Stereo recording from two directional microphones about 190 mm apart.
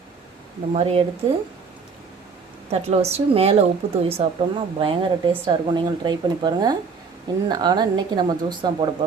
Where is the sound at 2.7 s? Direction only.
35° right (ahead or behind).